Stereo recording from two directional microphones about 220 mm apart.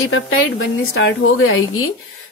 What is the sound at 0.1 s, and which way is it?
A woman's voice, 65° left (ahead or behind).